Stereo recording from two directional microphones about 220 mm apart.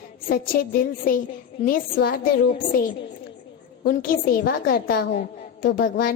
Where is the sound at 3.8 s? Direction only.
40° left (ahead or behind).